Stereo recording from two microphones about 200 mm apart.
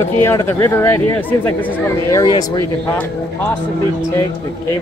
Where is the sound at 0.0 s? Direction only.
15° left (ahead or behind).